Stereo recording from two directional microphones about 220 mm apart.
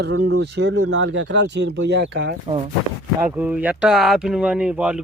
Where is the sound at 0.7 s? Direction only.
70° right (ahead or behind); by 2.3 s 50° right (ahead or behind).